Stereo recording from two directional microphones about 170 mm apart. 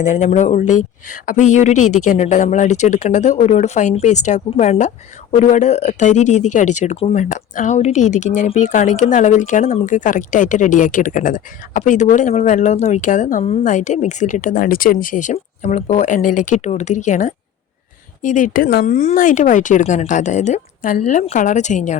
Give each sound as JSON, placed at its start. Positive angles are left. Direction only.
{"t": 0.0, "sound": "speech", "side_deg": 45}
{"t": 18.9, "sound": "speech", "side_deg": 45}